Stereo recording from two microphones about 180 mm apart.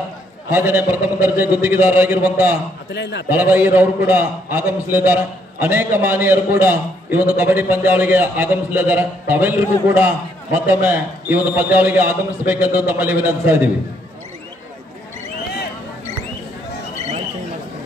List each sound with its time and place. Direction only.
0.5 s a man's voice: 10° right (ahead or behind)
2.9 s a man's voice: 75° left (ahead or behind)
3.3 s a man's voice: 10° right (ahead or behind)